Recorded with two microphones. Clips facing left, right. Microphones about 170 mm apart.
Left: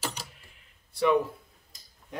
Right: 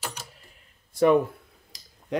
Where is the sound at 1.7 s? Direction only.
90° right.